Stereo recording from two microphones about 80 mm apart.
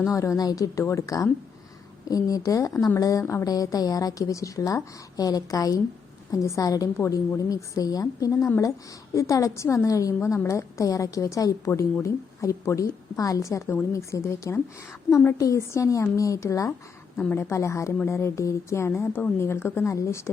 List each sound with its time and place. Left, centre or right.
0.0 s a woman's voice: left
11.7 s a woman's voice: left